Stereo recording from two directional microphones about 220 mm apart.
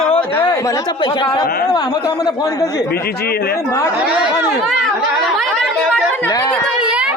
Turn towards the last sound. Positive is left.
turn(degrees=-5)  # may be behind; listen again after turning